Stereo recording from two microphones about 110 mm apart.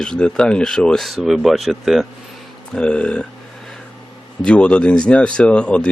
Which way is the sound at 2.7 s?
10° left (ahead or behind).